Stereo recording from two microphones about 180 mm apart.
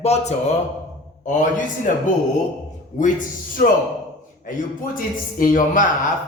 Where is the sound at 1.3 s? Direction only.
45° left (ahead or behind).